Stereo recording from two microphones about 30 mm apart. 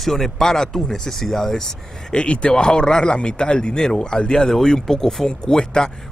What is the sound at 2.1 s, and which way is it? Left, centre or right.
Speech, left.